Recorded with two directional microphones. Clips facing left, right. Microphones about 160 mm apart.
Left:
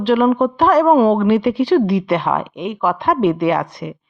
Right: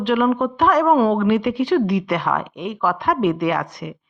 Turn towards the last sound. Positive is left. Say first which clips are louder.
# left 4 dB
turn(degrees=30)  # may be behind; listen again after turning